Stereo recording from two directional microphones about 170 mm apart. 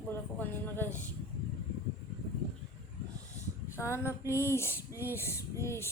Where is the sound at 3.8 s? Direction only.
15° left (ahead or behind).